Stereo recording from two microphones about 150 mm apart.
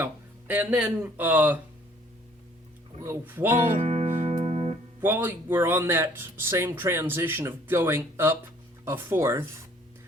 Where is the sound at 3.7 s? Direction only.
45° right (ahead or behind).